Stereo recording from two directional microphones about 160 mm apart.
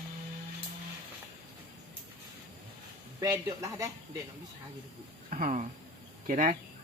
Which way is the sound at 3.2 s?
20° right (ahead or behind).